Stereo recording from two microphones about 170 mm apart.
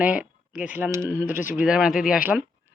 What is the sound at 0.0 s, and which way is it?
A woman's voice, 5° right (ahead or behind).